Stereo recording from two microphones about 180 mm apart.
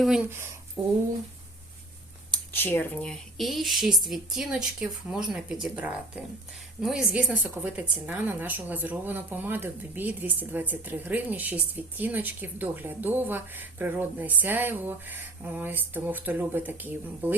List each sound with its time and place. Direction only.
0.8 s speech: 25° right (ahead or behind)
2.3 s a woman's voice: 10° left (ahead or behind); by 17.3 s 10° right (ahead or behind)